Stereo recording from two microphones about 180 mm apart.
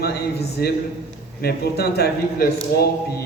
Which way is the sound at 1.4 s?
65° left (ahead or behind).